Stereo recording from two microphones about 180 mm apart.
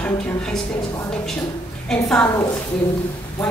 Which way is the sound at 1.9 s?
5° left (ahead or behind).